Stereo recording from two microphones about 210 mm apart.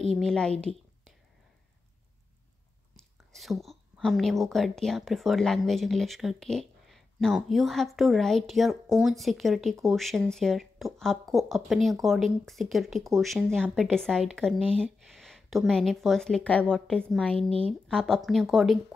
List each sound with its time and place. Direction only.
0.2 s speech: 5° left (ahead or behind)
3.0 s speech: centre (ahead or behind)
17.5 s speech: 25° right (ahead or behind)
17.8 s speech: centre (ahead or behind)